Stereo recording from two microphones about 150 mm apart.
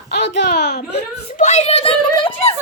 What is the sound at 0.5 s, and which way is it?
Speech, 90° left.